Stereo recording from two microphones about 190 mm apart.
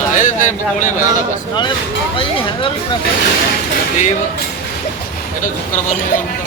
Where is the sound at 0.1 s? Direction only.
40° left (ahead or behind).